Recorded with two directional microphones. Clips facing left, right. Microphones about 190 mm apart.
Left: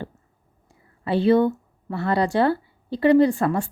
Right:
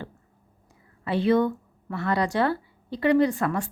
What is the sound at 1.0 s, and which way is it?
A woman's voice, 30° left (ahead or behind).